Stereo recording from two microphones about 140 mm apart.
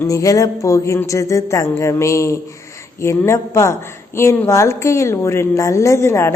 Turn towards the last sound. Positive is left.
turn(degrees=20)  # may be behind; listen again after turning